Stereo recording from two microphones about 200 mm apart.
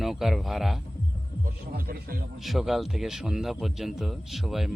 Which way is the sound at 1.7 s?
50° right (ahead or behind).